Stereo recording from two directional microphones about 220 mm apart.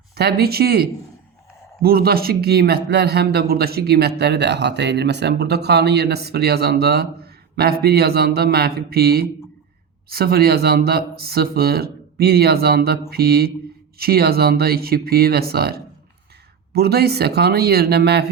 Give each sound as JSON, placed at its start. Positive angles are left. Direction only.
{"t": 0.2, "sound": "a man's voice", "side_deg": -45}